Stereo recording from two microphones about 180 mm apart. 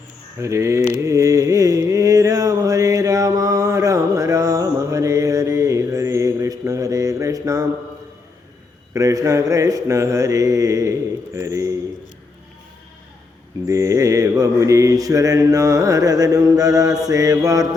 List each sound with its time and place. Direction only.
0.3 s speech: 15° right (ahead or behind)
0.9 s carnatic music: 20° right (ahead or behind)
8.9 s speech: 20° right (ahead or behind)
13.7 s mantra: 15° right (ahead or behind)